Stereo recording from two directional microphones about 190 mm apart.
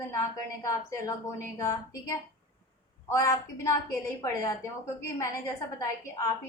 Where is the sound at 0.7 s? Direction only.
15° left (ahead or behind).